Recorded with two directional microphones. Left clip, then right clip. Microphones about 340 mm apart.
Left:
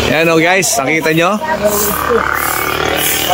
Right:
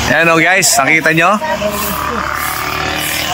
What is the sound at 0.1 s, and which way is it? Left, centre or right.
Speech, centre.